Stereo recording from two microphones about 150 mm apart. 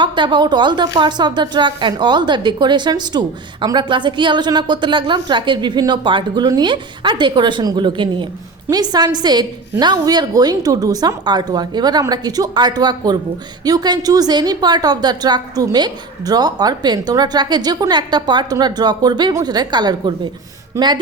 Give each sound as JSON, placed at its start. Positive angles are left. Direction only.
{"t": 0.0, "sound": "a woman's voice", "side_deg": -30}